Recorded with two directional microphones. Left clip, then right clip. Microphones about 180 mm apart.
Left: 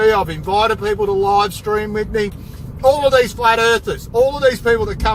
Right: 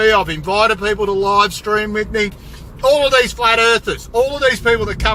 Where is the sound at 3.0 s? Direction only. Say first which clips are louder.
Even; 15° right (ahead or behind).